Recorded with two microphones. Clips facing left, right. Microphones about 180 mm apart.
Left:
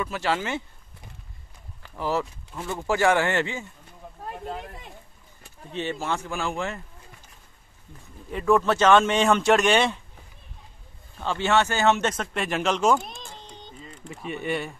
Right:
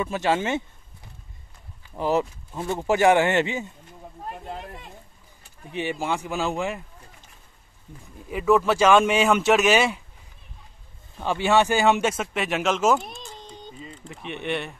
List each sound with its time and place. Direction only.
0.0 s speech: 20° right (ahead or behind)
2.0 s speech: 20° right (ahead or behind)
5.7 s speech: 15° right (ahead or behind)
8.3 s speech: 5° right (ahead or behind)
11.1 s speech: 15° right (ahead or behind)
14.0 s speech: centre (ahead or behind)